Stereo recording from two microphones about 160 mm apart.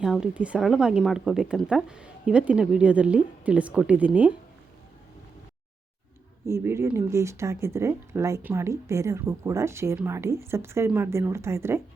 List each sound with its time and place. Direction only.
0.0 s speech: 5° right (ahead or behind)
6.4 s speech: 15° right (ahead or behind)